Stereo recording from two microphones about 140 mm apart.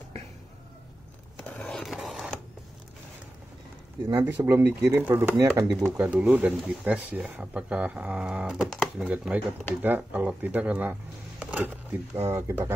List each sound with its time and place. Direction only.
1.4 s skateboard: 5° left (ahead or behind)
4.4 s speech: 20° right (ahead or behind)
5.9 s speech: 10° right (ahead or behind)